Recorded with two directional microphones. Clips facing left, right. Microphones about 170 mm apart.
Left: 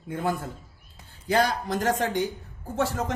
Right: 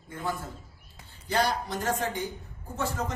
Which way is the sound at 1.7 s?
85° left.